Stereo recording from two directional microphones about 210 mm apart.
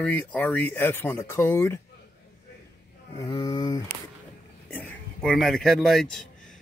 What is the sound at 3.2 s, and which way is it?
A man's voice, 15° left (ahead or behind).